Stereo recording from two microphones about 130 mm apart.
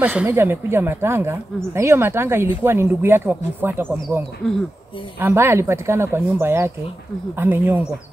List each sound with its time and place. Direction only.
0.0 s speech: 10° right (ahead or behind)